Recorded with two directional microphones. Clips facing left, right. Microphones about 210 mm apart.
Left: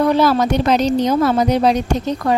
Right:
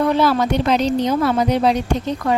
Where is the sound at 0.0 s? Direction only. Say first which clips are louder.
Left 2 dB; 40° left (ahead or behind).